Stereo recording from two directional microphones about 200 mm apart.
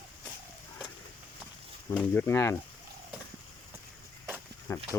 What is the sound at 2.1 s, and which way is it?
Speech, 10° left (ahead or behind).